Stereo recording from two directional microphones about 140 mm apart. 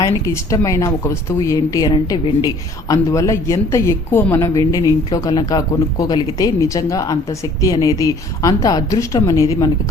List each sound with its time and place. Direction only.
0.0 s a woman's voice: 25° left (ahead or behind)